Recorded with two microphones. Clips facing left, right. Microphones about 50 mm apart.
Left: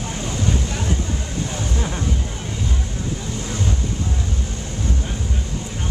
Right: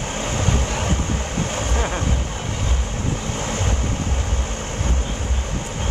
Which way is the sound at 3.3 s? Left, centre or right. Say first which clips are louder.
Right 1 dB; right.